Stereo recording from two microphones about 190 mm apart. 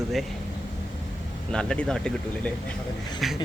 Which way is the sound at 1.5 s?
5° left (ahead or behind).